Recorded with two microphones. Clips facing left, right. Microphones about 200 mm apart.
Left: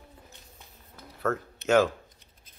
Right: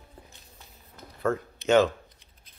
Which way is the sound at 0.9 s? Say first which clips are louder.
Right 2 dB; 5° left (ahead or behind).